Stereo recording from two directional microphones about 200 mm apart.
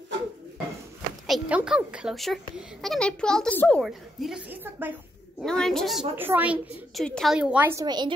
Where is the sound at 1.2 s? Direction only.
Centre (ahead or behind).